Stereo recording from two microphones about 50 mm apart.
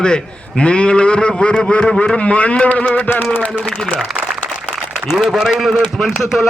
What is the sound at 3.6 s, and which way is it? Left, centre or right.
Speech, centre.